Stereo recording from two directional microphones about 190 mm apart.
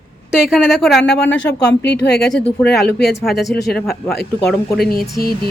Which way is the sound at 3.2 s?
Centre (ahead or behind).